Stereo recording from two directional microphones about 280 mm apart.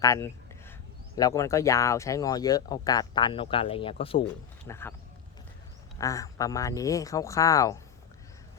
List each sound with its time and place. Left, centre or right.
0.0 s a sound: centre
1.1 s speech: centre
4.6 s speech: centre
6.0 s speech: centre